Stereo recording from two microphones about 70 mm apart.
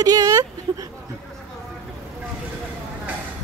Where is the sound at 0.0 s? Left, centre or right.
Right.